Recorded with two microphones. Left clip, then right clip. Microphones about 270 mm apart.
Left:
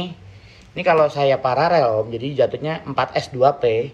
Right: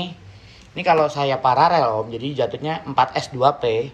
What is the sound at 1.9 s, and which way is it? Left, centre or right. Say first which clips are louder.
Speech: left 2 dB; right.